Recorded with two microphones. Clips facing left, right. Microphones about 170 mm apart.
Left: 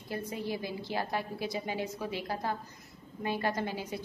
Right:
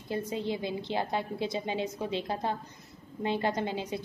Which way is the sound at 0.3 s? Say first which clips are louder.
Right 2 dB; 20° right (ahead or behind).